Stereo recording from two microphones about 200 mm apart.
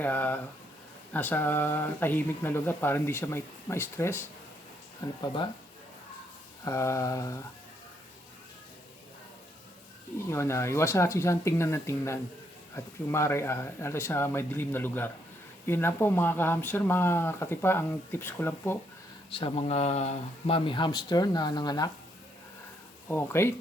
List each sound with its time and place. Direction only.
0.0 s speech: 10° left (ahead or behind)
5.2 s speech: 25° left (ahead or behind)
6.7 s speech: 15° left (ahead or behind)
10.2 s speech: 15° left (ahead or behind)
19.3 s speech: 25° left (ahead or behind)
23.0 s speech: 10° left (ahead or behind)